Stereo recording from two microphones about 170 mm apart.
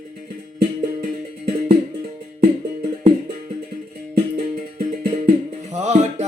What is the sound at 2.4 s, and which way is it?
Music, 40° right (ahead or behind).